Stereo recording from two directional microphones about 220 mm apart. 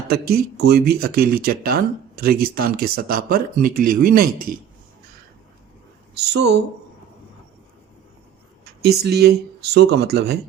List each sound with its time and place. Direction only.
0.1 s speech: 45° right (ahead or behind)
6.1 s speech: 50° right (ahead or behind)
8.8 s speech: 45° right (ahead or behind)